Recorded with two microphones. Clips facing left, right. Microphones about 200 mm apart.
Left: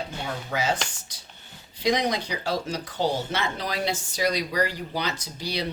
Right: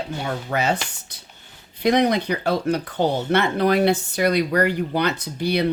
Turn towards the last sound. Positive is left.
turn(degrees=-60)  # may be behind; listen again after turning